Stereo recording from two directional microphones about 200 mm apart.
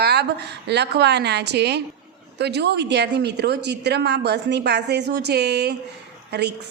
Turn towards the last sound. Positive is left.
turn(degrees=-55)  # may be behind; listen again after turning